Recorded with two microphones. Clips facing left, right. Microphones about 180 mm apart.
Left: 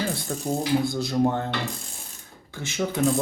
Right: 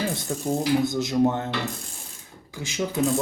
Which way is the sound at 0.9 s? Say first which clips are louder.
Right 1 dB; 20° right (ahead or behind).